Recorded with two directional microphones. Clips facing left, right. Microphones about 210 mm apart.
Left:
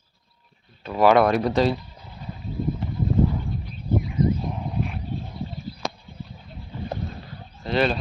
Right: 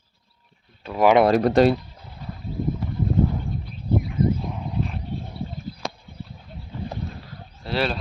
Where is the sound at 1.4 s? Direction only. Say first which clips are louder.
Right 4 dB; 60° right (ahead or behind).